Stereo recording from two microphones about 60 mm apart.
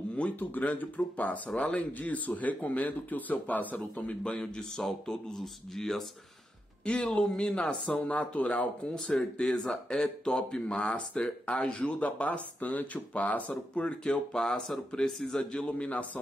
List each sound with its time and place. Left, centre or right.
0.4 s speech: left
4.2 s speech: centre
7.9 s speech: left
15.6 s speech: left